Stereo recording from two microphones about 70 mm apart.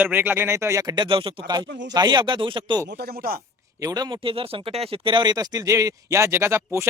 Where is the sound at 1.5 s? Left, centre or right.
Right.